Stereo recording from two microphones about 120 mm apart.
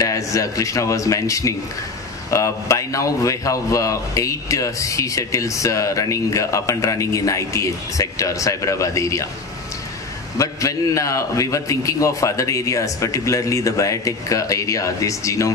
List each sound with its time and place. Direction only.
0.0 s a man's voice: 25° left (ahead or behind)
10.3 s a man's voice: 25° left (ahead or behind)